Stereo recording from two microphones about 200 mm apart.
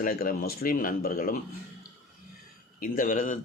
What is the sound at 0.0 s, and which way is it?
Speech, 45° left (ahead or behind).